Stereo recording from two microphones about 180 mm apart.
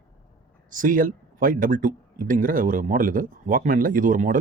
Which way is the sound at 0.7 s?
50° right (ahead or behind).